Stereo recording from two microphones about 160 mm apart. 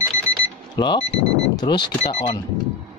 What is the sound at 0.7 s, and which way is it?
Speech, 30° left (ahead or behind).